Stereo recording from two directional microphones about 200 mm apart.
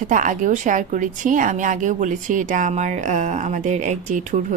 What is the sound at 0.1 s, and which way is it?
Speech, 40° right (ahead or behind).